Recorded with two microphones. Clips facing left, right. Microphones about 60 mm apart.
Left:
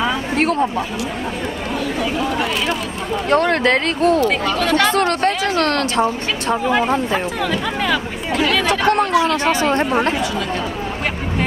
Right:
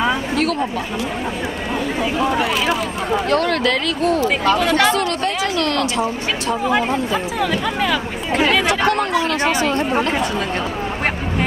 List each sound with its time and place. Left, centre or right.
3.2 s a woman's voice: left
7.5 s speech: centre
8.3 s speech: right
9.1 s speech: left
9.4 s speech: right